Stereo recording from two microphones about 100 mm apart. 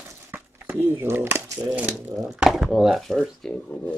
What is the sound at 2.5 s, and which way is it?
Speech, centre (ahead or behind).